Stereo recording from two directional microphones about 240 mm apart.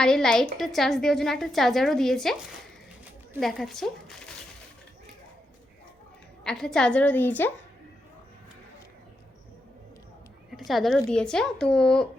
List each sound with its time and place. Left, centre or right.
0.0 s a woman's voice: centre
6.4 s a woman's voice: centre
10.6 s a woman's voice: centre